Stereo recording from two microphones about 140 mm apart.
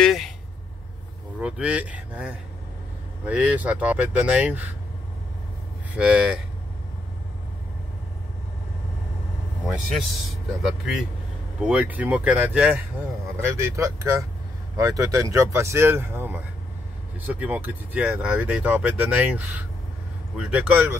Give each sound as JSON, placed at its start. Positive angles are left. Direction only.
{"t": 0.0, "sound": "a sound", "side_deg": 0}
{"t": 1.4, "sound": "speech", "side_deg": -10}
{"t": 5.9, "sound": "speech", "side_deg": -10}
{"t": 9.7, "sound": "speech", "side_deg": 0}